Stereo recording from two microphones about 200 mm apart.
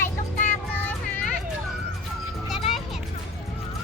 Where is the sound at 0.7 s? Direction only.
10° left (ahead or behind).